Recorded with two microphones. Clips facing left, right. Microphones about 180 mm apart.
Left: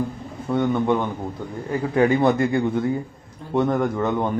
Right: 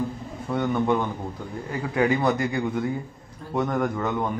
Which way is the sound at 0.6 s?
20° left (ahead or behind).